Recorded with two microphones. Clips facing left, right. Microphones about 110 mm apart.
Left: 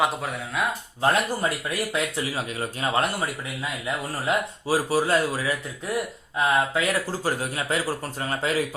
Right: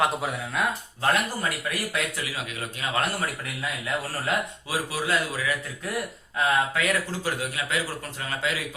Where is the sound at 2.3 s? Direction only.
35° left (ahead or behind).